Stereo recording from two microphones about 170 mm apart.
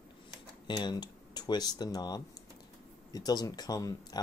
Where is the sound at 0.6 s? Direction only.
25° left (ahead or behind).